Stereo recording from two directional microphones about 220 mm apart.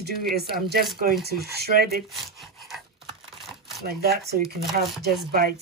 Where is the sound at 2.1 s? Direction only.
Centre (ahead or behind).